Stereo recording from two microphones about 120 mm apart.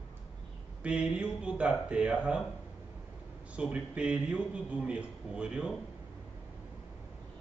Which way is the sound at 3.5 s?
10° right (ahead or behind).